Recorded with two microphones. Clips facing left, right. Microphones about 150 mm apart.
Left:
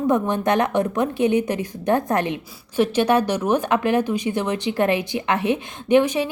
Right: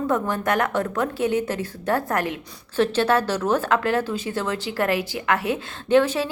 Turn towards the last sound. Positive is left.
turn(degrees=15)  # may be behind; listen again after turning